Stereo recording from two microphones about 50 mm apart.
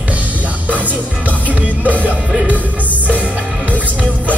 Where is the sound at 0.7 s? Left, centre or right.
Right.